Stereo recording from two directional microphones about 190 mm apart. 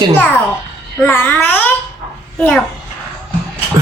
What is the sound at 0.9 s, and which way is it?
Speech, 10° left (ahead or behind).